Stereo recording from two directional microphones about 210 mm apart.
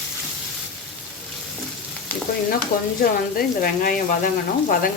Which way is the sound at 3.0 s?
45° left (ahead or behind).